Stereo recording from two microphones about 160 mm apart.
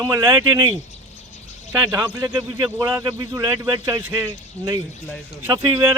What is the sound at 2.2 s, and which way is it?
A man's voice, 25° right (ahead or behind).